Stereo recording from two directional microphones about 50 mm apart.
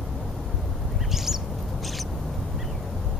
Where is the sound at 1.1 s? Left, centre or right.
Centre.